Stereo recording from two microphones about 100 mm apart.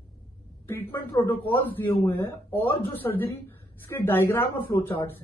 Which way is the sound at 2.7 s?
65° left (ahead or behind).